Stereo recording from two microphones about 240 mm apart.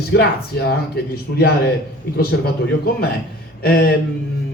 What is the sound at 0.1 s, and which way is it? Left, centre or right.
A man's voice, left.